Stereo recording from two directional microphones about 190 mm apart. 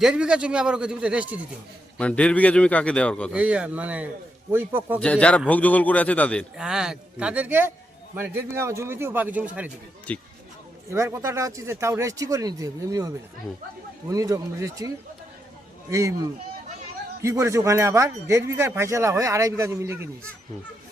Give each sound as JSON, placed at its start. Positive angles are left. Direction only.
{"t": 0.0, "sound": "a man's voice", "side_deg": -5}
{"t": 2.0, "sound": "a man's voice", "side_deg": 5}
{"t": 3.3, "sound": "speech", "side_deg": -5}
{"t": 4.9, "sound": "a man's voice", "side_deg": 5}
{"t": 6.6, "sound": "a man's voice", "side_deg": -5}
{"t": 10.1, "sound": "a man's voice", "side_deg": 5}
{"t": 10.9, "sound": "speech", "side_deg": -15}